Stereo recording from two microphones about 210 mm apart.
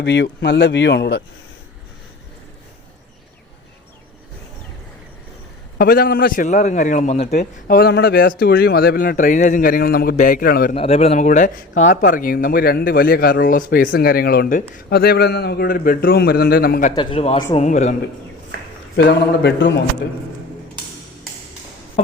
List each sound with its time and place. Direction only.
0.0 s speech: 55° left (ahead or behind)
5.7 s a man's voice: 45° left (ahead or behind)
7.3 s speech: 45° left (ahead or behind)
10.8 s a man's voice: 30° left (ahead or behind); by 16.9 s 45° left (ahead or behind)
16.9 s a man's voice: 25° left (ahead or behind)
18.9 s speech: 55° left (ahead or behind)
22.0 s a sound: 30° left (ahead or behind)